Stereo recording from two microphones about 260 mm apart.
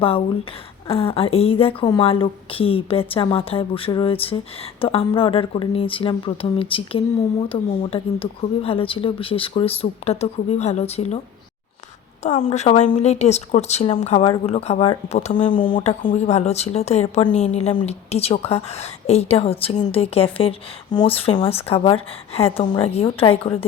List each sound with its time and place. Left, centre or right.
0.9 s speech: left
12.2 s speech: left